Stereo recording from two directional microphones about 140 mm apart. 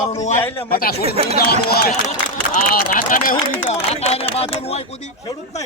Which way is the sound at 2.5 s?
80° left.